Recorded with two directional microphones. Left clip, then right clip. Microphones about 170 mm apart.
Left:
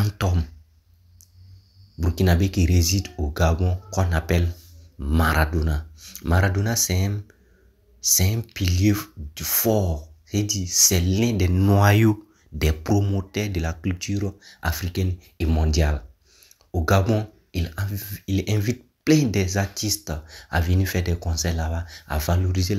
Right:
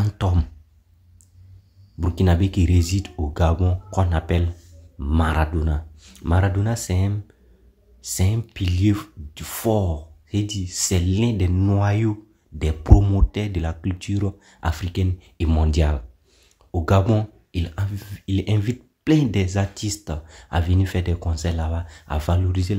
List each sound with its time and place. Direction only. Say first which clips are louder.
0.2 s speech: even; 5° right (ahead or behind)
2.0 s speech: even; 15° right (ahead or behind); by 11.8 s 10° left (ahead or behind)
11.8 s speech: left 5 dB; 25° left (ahead or behind)
12.8 s speech: right 4 dB; 15° right (ahead or behind)
13.2 s speech: even; 5° right (ahead or behind)